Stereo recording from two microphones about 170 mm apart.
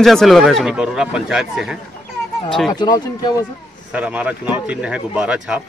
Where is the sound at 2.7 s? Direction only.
25° left (ahead or behind).